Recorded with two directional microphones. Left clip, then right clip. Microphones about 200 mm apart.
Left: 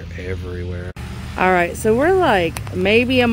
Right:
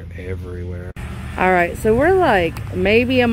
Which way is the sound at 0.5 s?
Centre (ahead or behind).